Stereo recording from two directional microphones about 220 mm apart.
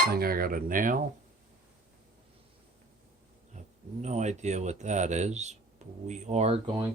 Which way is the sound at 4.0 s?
30° right (ahead or behind).